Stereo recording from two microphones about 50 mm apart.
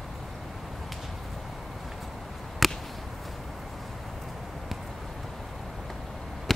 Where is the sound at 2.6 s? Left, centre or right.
Centre.